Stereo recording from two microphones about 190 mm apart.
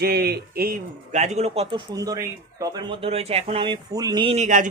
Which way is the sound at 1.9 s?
20° right (ahead or behind).